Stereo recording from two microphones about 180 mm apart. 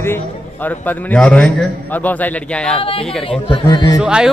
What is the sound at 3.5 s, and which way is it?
Speech, 25° left (ahead or behind).